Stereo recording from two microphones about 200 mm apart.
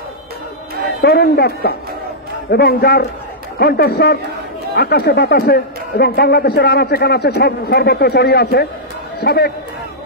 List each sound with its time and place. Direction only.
1.0 s a man's voice: 50° left (ahead or behind)